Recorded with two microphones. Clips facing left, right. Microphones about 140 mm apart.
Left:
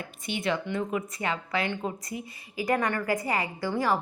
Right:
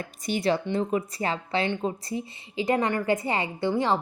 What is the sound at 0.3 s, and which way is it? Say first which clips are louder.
A woman's voice: right 4 dB; 35° right (ahead or behind).